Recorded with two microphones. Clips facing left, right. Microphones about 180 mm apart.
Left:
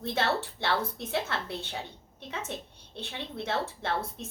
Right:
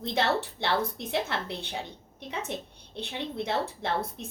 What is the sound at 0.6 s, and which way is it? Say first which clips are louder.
A woman's voice: right 2 dB; 15° right (ahead or behind).